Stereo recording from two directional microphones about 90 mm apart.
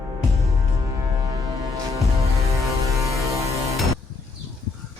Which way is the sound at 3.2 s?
35° right (ahead or behind).